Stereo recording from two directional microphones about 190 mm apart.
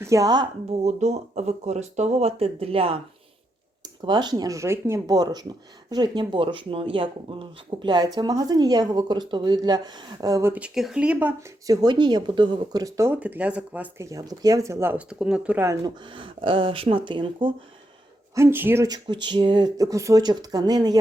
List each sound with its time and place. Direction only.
0.0 s speech: 15° right (ahead or behind)
0.9 s speech: 35° right (ahead or behind)
18.3 s speech: 10° right (ahead or behind)